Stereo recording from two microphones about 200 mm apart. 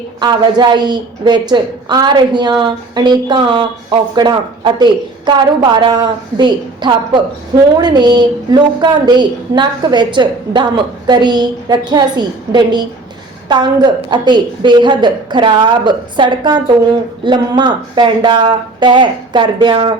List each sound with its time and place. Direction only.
0.2 s a woman's voice: 20° right (ahead or behind)